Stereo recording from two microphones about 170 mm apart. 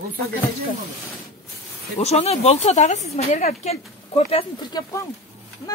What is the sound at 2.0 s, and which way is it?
Speech, 40° left (ahead or behind).